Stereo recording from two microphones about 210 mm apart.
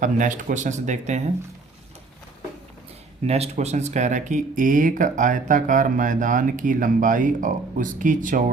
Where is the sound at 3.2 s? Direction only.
30° right (ahead or behind).